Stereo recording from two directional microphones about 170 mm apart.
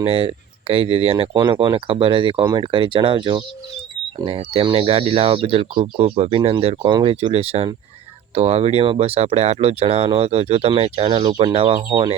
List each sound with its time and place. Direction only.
0.0 s speech: 35° right (ahead or behind)
1.3 s speech: 20° right (ahead or behind)